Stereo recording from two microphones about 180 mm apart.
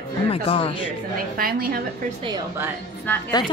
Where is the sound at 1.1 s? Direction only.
55° right (ahead or behind).